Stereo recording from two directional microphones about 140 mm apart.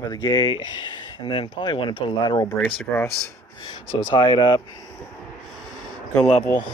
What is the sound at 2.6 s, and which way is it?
Speech, 15° left (ahead or behind).